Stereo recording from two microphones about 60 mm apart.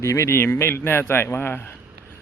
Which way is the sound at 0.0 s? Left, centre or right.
Left.